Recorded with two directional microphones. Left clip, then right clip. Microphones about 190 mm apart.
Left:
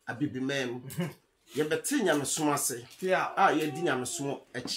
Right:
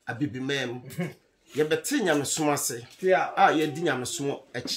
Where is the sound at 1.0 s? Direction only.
60° left (ahead or behind).